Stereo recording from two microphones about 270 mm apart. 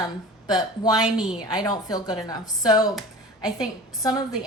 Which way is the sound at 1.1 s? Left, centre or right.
Centre.